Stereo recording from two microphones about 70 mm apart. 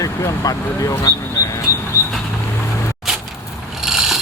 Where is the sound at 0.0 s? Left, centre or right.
Left.